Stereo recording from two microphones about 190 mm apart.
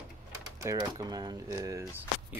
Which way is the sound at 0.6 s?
15° right (ahead or behind).